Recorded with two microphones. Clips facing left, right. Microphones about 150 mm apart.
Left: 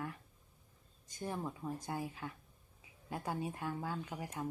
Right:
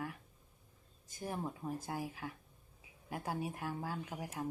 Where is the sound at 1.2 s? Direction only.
10° right (ahead or behind).